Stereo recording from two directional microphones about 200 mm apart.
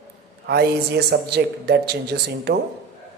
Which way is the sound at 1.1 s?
55° right (ahead or behind).